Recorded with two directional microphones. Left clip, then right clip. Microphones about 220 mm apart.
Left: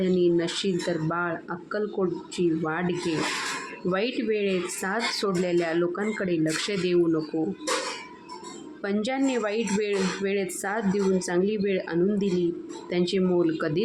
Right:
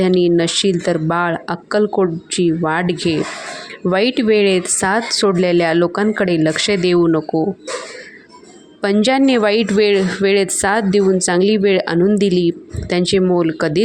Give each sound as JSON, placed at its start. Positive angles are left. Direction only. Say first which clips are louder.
{"t": 0.0, "sound": "speech", "louder": "right 9 dB", "side_deg": -35}
{"t": 8.8, "sound": "speech", "louder": "right 13 dB", "side_deg": -40}